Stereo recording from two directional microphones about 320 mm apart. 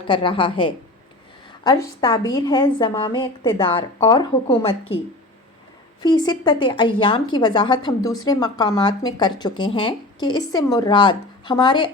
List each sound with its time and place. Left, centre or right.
0.1 s speech: centre
1.6 s speech: centre
6.0 s speech: centre